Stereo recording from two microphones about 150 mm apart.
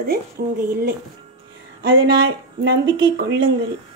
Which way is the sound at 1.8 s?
90° right.